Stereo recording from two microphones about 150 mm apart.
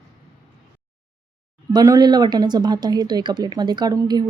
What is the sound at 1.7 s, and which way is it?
Speech, 25° right (ahead or behind).